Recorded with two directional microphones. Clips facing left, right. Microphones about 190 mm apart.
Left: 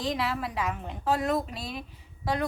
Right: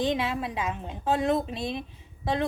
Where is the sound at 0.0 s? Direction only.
20° right (ahead or behind).